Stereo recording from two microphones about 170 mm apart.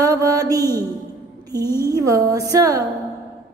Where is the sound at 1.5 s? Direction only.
20° right (ahead or behind).